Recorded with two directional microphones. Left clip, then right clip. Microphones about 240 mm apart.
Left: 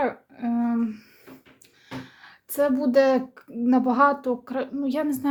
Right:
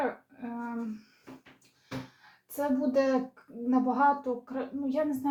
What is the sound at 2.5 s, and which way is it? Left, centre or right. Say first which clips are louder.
A woman's voice: left 8 dB; left.